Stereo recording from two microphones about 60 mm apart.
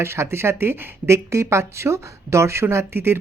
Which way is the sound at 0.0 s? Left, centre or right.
Right.